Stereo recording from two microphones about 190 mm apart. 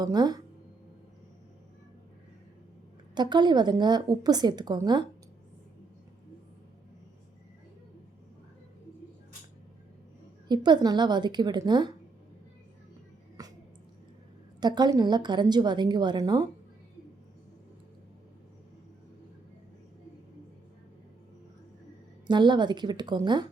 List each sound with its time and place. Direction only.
0.0 s a woman's voice: 20° right (ahead or behind)
3.2 s a woman's voice: 25° right (ahead or behind)
10.5 s a woman's voice: 25° right (ahead or behind)
13.4 s music: 20° right (ahead or behind)
14.6 s a woman's voice: 20° right (ahead or behind)
22.3 s a woman's voice: 25° right (ahead or behind)